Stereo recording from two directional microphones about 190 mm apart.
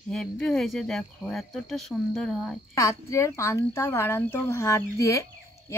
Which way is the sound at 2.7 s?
15° left (ahead or behind).